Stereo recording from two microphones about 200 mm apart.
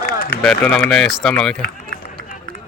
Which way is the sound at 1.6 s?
45° left (ahead or behind).